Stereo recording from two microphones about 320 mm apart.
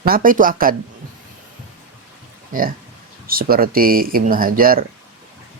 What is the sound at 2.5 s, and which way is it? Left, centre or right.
Speech, right.